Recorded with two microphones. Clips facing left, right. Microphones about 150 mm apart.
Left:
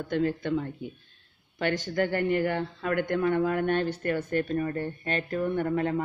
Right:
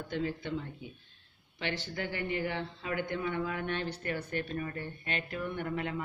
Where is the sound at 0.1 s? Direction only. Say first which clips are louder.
Left 8 dB; 50° left (ahead or behind).